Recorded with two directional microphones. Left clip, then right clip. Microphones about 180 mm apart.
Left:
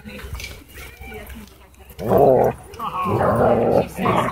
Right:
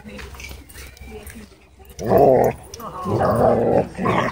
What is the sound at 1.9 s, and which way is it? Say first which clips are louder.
Dog: even; 15° right (ahead or behind).